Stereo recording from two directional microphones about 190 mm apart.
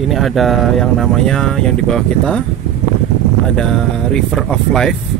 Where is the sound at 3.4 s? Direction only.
5° left (ahead or behind).